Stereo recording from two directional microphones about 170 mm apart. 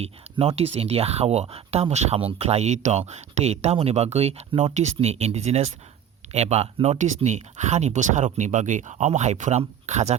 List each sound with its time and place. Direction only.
0.0 s speech: 35° right (ahead or behind)